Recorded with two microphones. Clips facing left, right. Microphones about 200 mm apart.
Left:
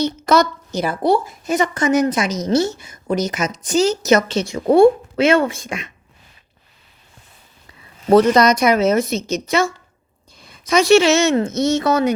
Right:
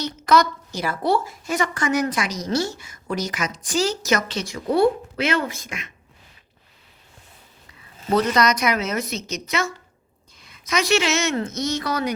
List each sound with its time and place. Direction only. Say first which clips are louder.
0.0 s a woman's voice: left 3 dB; 25° left (ahead or behind)
8.1 s a woman's voice: left 7 dB; 30° left (ahead or behind)